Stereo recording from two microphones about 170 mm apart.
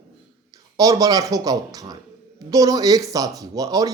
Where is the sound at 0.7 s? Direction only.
20° right (ahead or behind).